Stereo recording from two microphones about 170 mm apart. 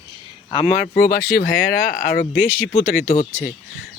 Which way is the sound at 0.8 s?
55° left (ahead or behind).